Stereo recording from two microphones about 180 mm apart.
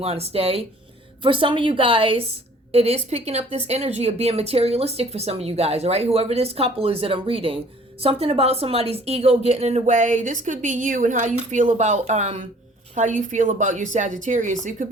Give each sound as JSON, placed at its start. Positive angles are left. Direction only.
{"t": 0.0, "sound": "a woman's voice", "side_deg": -35}